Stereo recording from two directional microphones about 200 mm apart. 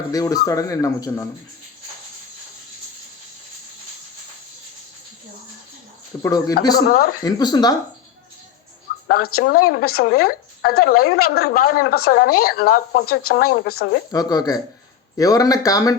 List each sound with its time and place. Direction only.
0.1 s speech: 15° left (ahead or behind)
6.1 s speech: 15° left (ahead or behind)
6.7 s a woman's voice: 50° left (ahead or behind)
7.3 s speech: 20° left (ahead or behind)
9.0 s a woman's voice: 50° left (ahead or behind)
14.1 s speech: 20° left (ahead or behind)